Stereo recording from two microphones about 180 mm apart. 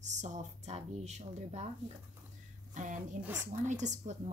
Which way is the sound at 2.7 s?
45° right (ahead or behind).